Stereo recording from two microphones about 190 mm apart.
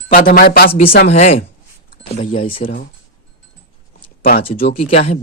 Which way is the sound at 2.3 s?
30° left (ahead or behind).